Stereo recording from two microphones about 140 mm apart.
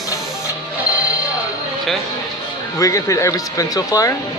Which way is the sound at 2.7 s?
25° left (ahead or behind).